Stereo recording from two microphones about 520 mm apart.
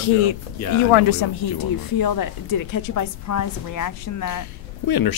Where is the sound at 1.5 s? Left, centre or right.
Left.